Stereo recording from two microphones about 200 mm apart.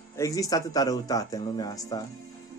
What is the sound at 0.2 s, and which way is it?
Speech, 15° left (ahead or behind).